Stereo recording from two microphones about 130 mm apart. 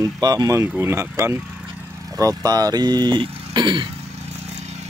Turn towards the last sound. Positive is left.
turn(degrees=-35)  # may be behind; listen again after turning